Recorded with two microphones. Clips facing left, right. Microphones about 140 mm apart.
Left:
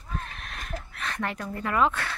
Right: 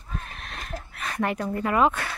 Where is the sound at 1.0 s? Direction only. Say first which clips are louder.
Right 5 dB; 15° right (ahead or behind).